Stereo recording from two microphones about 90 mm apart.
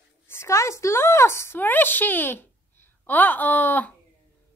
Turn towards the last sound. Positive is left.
turn(degrees=20)  # may be behind; listen again after turning